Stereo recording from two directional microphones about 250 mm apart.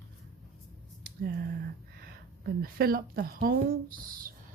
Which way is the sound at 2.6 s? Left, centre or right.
Right.